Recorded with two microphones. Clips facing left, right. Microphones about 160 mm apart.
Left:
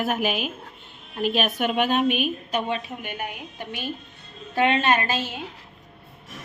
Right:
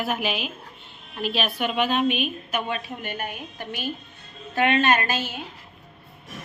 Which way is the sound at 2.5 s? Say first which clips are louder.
Left 2 dB; 30° left (ahead or behind).